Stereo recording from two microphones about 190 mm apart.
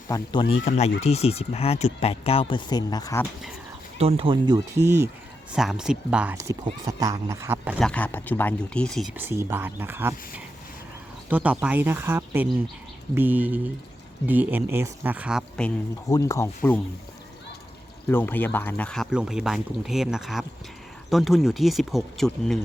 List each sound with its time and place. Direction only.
0.1 s speech: 25° left (ahead or behind)
3.9 s speech: 30° right (ahead or behind); by 5.0 s 15° right (ahead or behind)
5.5 s speech: centre (ahead or behind)
6.3 s speech: 20° right (ahead or behind)
7.8 s speech: 5° left (ahead or behind)
9.1 s speech: 10° right (ahead or behind)
16.0 s speech: 15° left (ahead or behind)
18.1 s speech: 10° left (ahead or behind)